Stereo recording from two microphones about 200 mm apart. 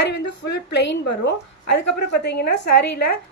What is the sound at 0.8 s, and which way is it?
A woman's voice, 60° left (ahead or behind).